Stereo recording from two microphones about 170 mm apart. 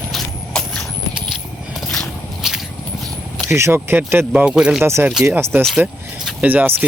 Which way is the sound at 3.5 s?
15° right (ahead or behind).